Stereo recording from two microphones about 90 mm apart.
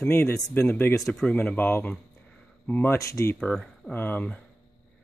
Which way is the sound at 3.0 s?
35° left (ahead or behind).